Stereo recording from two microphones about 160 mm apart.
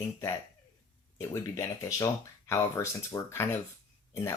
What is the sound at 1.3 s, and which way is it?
Speech, 20° left (ahead or behind).